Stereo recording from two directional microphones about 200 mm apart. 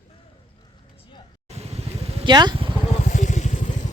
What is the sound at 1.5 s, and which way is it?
Vehicle, 30° right (ahead or behind).